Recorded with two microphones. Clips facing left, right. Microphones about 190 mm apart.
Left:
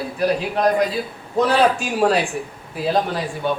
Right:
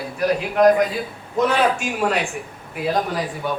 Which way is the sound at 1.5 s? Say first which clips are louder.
Left 4 dB; 35° left (ahead or behind).